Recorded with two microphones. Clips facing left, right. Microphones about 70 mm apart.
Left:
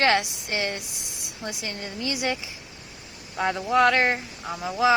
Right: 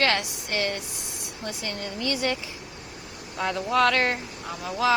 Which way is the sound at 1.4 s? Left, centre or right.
Centre.